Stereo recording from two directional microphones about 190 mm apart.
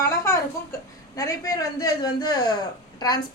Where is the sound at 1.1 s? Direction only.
15° left (ahead or behind).